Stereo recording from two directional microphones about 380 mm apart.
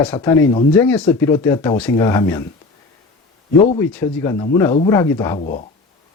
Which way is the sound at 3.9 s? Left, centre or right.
Centre.